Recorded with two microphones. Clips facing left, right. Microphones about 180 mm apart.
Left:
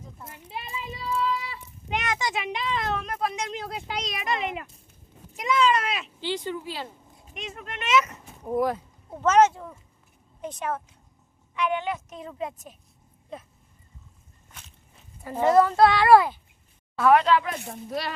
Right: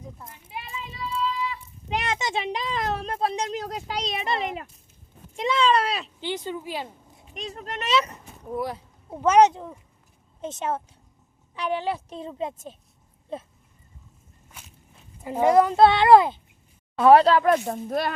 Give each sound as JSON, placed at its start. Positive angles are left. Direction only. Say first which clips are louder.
{"t": 1.9, "sound": "speech", "louder": "right 1 dB", "side_deg": -30}
{"t": 6.1, "sound": "speech", "louder": "even", "side_deg": -20}
{"t": 7.3, "sound": "speech", "louder": "right 3 dB", "side_deg": -35}
{"t": 8.5, "sound": "speech", "louder": "left 5 dB", "side_deg": 50}
{"t": 9.0, "sound": "speech", "louder": "right 2 dB", "side_deg": -10}
{"t": 15.2, "sound": "speech", "louder": "right 1 dB", "side_deg": -15}
{"t": 17.0, "sound": "speech", "louder": "right 4 dB", "side_deg": -30}